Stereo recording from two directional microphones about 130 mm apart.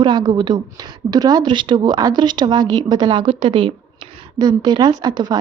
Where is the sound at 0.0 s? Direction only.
35° right (ahead or behind).